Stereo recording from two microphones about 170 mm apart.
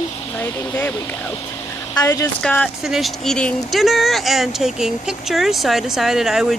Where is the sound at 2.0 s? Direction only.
20° left (ahead or behind).